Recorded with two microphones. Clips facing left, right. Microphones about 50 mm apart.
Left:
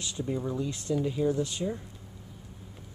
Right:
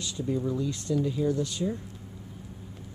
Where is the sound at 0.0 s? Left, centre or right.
Centre.